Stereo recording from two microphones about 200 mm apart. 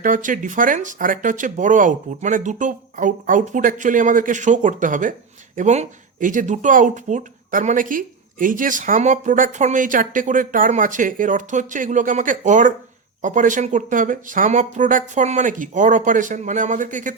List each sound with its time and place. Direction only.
0.0 s speech: 40° right (ahead or behind)